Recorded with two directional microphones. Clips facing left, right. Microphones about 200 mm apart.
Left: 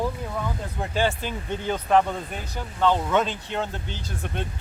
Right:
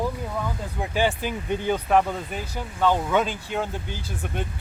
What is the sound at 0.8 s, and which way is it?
Speech, 15° right (ahead or behind).